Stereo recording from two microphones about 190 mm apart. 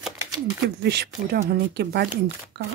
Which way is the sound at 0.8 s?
60° right (ahead or behind).